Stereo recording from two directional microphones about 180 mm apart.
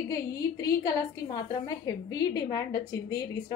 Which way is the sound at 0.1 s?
20° left (ahead or behind).